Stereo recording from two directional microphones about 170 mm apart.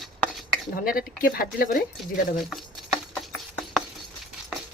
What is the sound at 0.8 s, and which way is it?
Speech, 55° left (ahead or behind).